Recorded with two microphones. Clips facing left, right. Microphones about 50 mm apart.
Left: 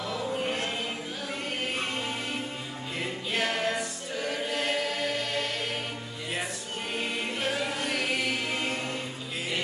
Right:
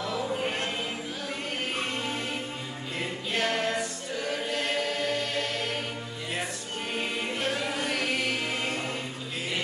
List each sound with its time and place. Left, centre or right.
0.0 s choir: centre
3.0 s choir: centre
7.0 s music: centre